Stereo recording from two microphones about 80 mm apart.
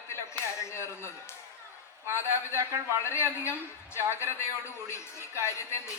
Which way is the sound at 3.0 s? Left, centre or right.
Left.